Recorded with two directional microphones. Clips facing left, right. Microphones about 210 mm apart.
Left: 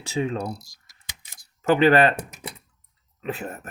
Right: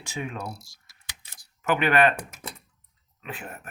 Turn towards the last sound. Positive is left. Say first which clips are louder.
# left 8 dB
turn(degrees=40)  # may be behind; listen again after turning